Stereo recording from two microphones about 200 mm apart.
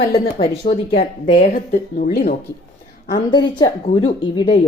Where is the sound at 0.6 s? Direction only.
40° left (ahead or behind).